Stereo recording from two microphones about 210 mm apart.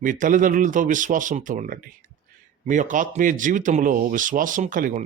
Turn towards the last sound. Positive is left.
turn(degrees=-40)  # may be behind; listen again after turning